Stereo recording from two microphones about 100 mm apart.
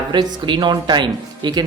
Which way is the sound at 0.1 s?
50° right (ahead or behind).